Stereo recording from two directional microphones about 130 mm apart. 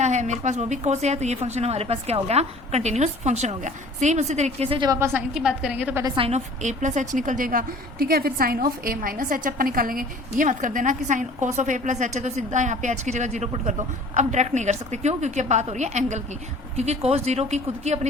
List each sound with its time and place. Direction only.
0.0 s a woman's voice: 65° right (ahead or behind)
4.9 s a woman's voice: 20° right (ahead or behind)
5.3 s a woman's voice: 5° right (ahead or behind)
6.1 s a woman's voice: 45° right (ahead or behind)
6.6 s a woman's voice: 65° right (ahead or behind)